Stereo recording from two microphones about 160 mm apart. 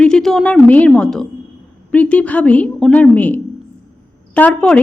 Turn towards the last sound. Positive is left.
turn(degrees=10)  # may be behind; listen again after turning